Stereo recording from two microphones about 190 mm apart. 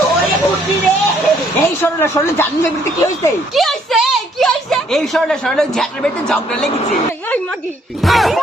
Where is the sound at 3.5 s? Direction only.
Centre (ahead or behind).